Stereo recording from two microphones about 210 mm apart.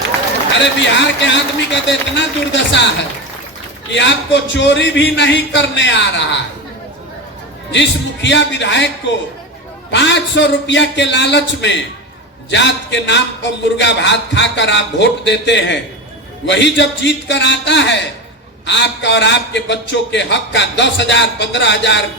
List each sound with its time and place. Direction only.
0.6 s a man's voice: 55° left (ahead or behind)
3.9 s a man's voice: 55° left (ahead or behind)
7.7 s a man's voice: 60° left (ahead or behind)
9.9 s a man's voice: 60° left (ahead or behind)